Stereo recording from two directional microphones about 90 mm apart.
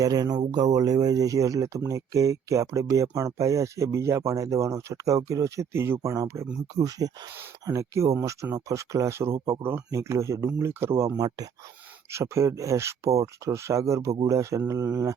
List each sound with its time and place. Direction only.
0.0 s speech: 45° right (ahead or behind); by 11.1 s 30° right (ahead or behind)
11.2 s speech: 45° right (ahead or behind)
12.1 s speech: 30° right (ahead or behind)